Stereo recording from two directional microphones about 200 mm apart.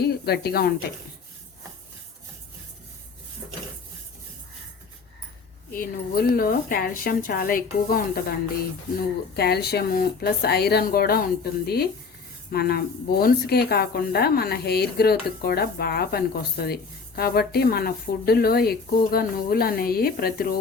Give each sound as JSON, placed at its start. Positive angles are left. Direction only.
{"t": 0.0, "sound": "a woman's voice", "side_deg": 55}
{"t": 5.7, "sound": "a woman's voice", "side_deg": 45}